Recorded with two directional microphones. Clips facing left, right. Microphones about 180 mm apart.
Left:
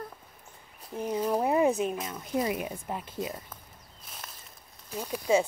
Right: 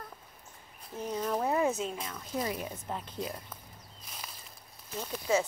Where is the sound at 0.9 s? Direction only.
15° left (ahead or behind).